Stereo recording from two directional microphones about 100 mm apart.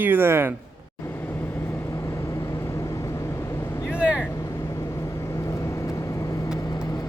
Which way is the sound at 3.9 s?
10° right (ahead or behind).